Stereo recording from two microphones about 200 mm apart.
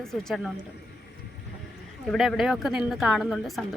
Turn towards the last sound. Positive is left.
turn(degrees=0)  # may be behind; listen again after turning